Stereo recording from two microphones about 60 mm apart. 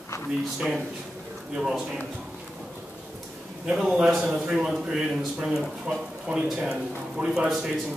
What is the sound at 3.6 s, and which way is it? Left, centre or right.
A man's voice, centre.